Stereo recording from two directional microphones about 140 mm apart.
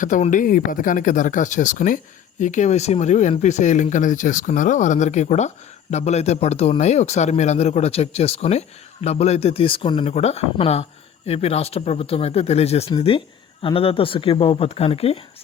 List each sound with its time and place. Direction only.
0.0 s speech: 65° left (ahead or behind); by 15.2 s 45° left (ahead or behind)